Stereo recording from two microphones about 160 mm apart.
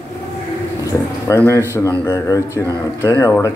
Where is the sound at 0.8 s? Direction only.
15° left (ahead or behind).